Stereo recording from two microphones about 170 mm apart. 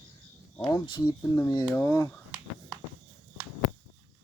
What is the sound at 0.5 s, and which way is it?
Speech, 10° left (ahead or behind).